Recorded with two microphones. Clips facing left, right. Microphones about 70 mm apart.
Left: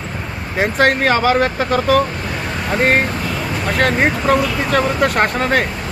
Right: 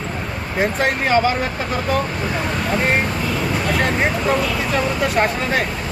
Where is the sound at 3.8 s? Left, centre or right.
Left.